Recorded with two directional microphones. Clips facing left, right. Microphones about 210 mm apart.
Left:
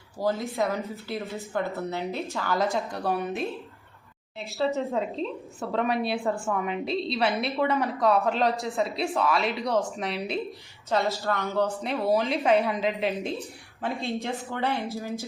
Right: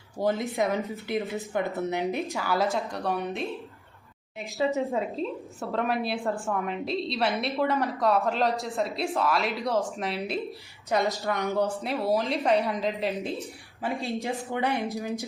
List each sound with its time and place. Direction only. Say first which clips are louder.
0.2 s a woman's voice: right 1 dB; 20° right (ahead or behind); by 3.4 s centre (ahead or behind)
4.4 s speech: even; 15° right (ahead or behind)
4.9 s a woman's voice: even; centre (ahead or behind)
10.8 s speech: even; 15° right (ahead or behind)
11.8 s a woman's voice: left 1 dB; centre (ahead or behind)
13.8 s speech: even; 15° right (ahead or behind)